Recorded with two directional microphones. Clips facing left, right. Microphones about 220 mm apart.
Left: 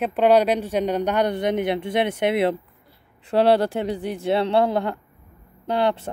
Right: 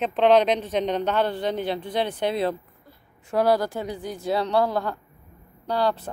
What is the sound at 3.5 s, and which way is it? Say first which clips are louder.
Speech: left 5 dB; 30° left (ahead or behind).